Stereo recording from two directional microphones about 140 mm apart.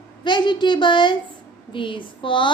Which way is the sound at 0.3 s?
35° left (ahead or behind).